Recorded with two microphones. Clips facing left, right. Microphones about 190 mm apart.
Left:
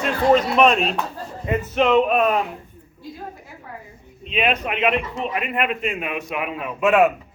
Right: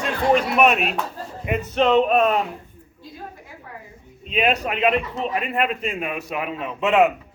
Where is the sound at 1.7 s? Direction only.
35° right (ahead or behind).